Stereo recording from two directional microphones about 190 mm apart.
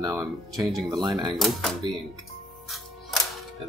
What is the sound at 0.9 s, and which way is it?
Speech, 20° right (ahead or behind).